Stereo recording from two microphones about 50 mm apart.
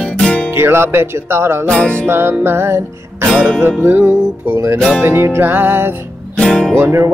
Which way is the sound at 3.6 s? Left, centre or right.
Right.